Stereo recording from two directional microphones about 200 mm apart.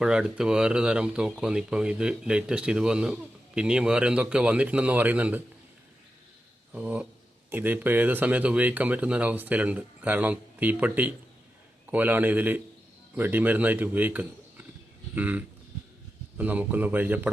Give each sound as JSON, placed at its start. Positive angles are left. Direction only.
{"t": 0.0, "sound": "speech", "side_deg": -5}
{"t": 6.7, "sound": "a man's voice", "side_deg": -5}
{"t": 15.1, "sound": "a sound", "side_deg": -10}
{"t": 16.4, "sound": "speech", "side_deg": -10}